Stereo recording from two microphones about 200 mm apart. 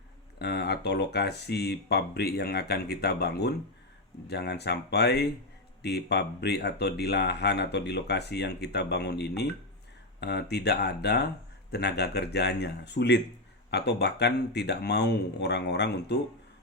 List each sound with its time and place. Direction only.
0.3 s speech: 55° left (ahead or behind)